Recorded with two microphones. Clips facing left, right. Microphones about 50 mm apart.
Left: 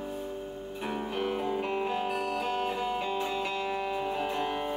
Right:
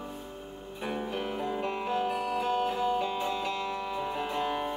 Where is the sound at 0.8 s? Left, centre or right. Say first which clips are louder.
Even; centre.